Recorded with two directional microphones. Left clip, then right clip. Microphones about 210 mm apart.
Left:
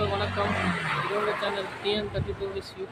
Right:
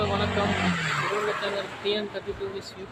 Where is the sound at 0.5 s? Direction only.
45° right (ahead or behind).